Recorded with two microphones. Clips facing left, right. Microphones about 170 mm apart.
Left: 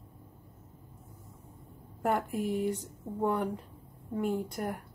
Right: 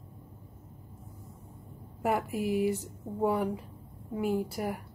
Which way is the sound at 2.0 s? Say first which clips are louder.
Right 1 dB; 5° right (ahead or behind).